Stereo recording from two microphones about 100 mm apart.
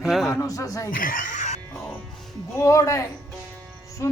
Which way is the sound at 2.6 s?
30° left (ahead or behind).